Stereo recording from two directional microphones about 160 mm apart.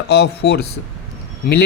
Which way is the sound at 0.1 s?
90° left.